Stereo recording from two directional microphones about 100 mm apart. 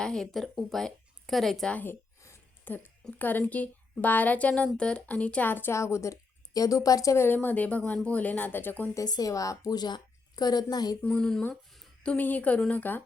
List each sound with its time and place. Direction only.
0.0 s speech: 5° left (ahead or behind)
1.8 s a sound: 25° left (ahead or behind)
3.2 s a woman's voice: 20° left (ahead or behind)
9.0 s a woman's voice: 40° left (ahead or behind)
11.0 s speech: 10° left (ahead or behind)
12.1 s a woman's voice: 15° left (ahead or behind)